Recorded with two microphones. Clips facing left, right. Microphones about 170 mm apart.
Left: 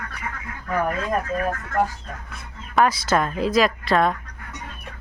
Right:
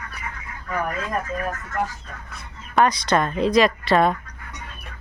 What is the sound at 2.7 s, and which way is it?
A woman's voice, 5° left (ahead or behind).